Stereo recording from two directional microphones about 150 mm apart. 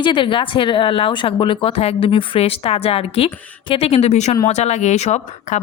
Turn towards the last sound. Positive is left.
turn(degrees=50)  # may be behind; listen again after turning